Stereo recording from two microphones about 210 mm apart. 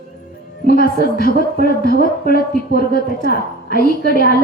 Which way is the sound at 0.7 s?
45° left (ahead or behind).